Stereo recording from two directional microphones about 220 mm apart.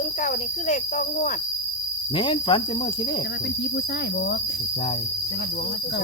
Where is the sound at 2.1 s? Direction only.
20° left (ahead or behind).